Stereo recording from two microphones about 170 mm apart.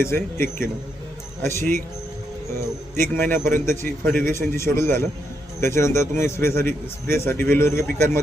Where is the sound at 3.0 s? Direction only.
15° left (ahead or behind).